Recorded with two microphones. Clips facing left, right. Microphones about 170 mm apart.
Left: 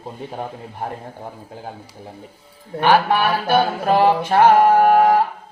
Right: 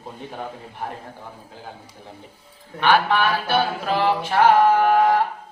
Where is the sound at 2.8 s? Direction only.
45° left (ahead or behind).